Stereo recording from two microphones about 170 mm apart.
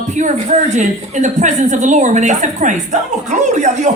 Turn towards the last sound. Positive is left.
turn(degrees=-45)  # may be behind; listen again after turning